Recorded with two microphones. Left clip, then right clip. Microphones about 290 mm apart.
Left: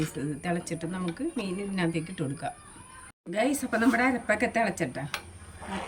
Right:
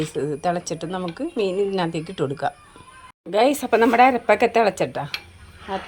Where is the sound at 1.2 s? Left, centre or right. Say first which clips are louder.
Right 5 dB; right.